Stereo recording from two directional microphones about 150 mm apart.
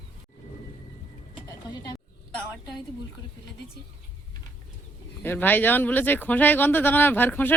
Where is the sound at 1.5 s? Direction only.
25° left (ahead or behind).